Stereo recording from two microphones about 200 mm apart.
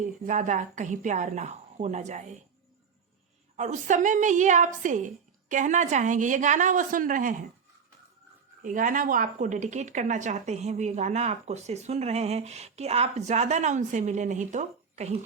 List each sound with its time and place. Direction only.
0.0 s a woman's voice: 40° right (ahead or behind)
3.6 s a woman's voice: 40° right (ahead or behind)
8.6 s a woman's voice: 40° right (ahead or behind)